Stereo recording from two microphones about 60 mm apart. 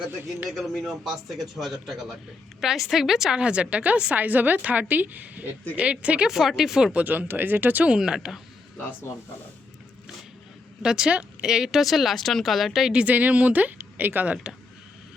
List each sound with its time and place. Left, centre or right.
0.5 s a man's voice: centre
6.3 s speech: centre
6.9 s a woman's voice: right
7.9 s speech: centre
10.8 s a man's voice: centre
12.9 s a woman's voice: centre